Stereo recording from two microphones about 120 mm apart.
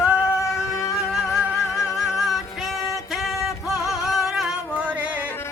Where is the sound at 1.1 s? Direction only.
5° right (ahead or behind).